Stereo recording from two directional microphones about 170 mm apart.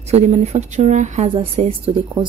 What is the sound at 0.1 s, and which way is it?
Speech, 40° right (ahead or behind).